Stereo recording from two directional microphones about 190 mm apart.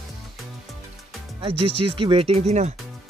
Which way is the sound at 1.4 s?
30° right (ahead or behind).